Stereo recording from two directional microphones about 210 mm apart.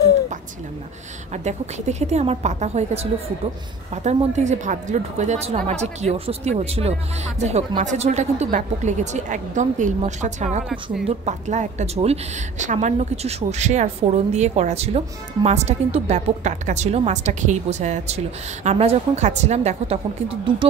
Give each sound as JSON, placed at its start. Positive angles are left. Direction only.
{"t": 1.3, "sound": "a woman's voice", "side_deg": -35}